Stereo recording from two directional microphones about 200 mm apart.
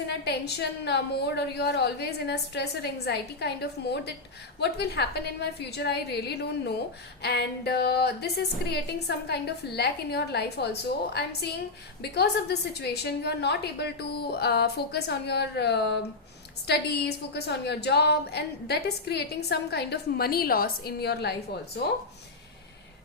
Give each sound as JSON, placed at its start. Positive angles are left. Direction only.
{"t": 0.3, "sound": "a woman's voice", "side_deg": 55}